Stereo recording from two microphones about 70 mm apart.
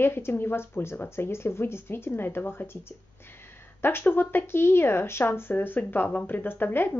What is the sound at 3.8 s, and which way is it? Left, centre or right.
Speech, left.